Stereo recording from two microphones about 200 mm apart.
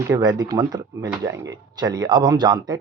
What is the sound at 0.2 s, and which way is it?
Speech, 20° right (ahead or behind).